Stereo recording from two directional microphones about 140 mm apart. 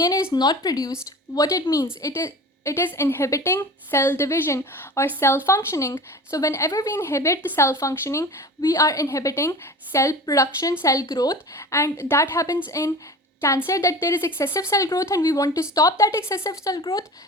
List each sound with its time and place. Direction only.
0.0 s a woman's voice: 20° left (ahead or behind)
13.7 s a woman's voice: 20° left (ahead or behind)